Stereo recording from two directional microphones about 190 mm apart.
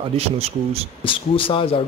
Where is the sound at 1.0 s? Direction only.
25° left (ahead or behind).